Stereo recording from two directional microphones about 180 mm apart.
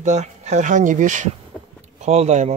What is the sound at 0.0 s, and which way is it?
Speech, 40° right (ahead or behind).